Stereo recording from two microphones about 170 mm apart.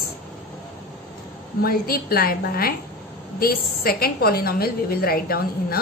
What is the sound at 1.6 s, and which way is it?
A woman's voice, 60° left (ahead or behind).